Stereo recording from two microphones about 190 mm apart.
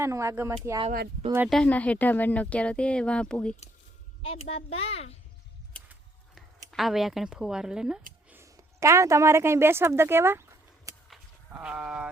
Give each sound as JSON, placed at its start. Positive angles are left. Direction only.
{"t": 0.0, "sound": "speech", "side_deg": -15}
{"t": 1.5, "sound": "speech", "side_deg": 5}
{"t": 4.2, "sound": "a child's voice", "side_deg": 30}
{"t": 6.7, "sound": "speech", "side_deg": 0}
{"t": 8.3, "sound": "speech", "side_deg": -15}
{"t": 11.1, "sound": "a sound", "side_deg": -5}